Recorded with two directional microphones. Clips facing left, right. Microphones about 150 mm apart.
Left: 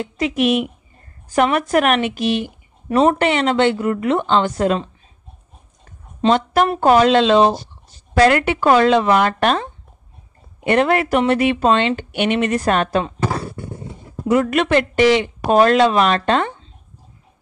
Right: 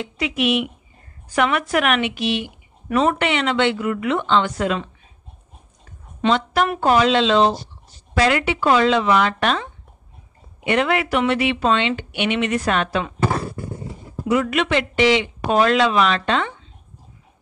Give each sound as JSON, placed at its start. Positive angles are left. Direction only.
{"t": 0.0, "sound": "speech", "side_deg": 40}
{"t": 6.2, "sound": "speech", "side_deg": 40}
{"t": 14.2, "sound": "speech", "side_deg": 45}